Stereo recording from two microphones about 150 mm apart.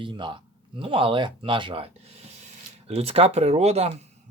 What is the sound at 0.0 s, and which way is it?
Speech, 35° right (ahead or behind).